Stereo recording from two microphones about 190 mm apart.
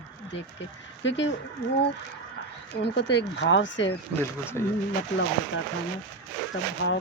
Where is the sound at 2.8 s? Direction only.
60° left (ahead or behind).